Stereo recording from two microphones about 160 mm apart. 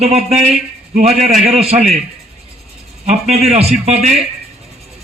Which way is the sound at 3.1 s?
45° right (ahead or behind).